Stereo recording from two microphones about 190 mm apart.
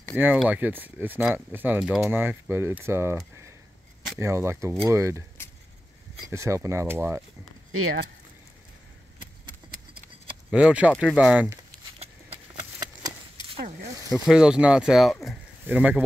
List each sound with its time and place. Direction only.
0.2 s speech: 10° right (ahead or behind)
4.2 s speech: 15° right (ahead or behind)
6.2 s speech: 15° right (ahead or behind)
7.8 s speech: 90° right
10.5 s speech: 5° right (ahead or behind)
13.4 s zipper: 25° left (ahead or behind)
14.2 s speech: 5° right (ahead or behind)